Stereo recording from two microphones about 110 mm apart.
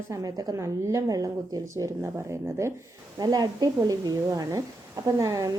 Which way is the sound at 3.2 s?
35° right (ahead or behind).